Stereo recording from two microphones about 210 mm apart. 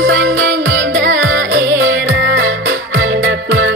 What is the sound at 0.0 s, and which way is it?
Music, 65° right (ahead or behind).